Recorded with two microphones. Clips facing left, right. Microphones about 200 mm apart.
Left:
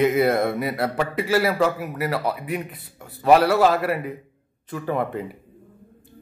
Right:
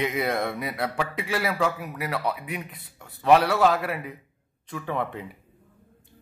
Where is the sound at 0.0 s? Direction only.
5° left (ahead or behind).